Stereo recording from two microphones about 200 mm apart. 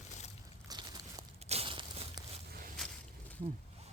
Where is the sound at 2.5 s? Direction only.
45° right (ahead or behind).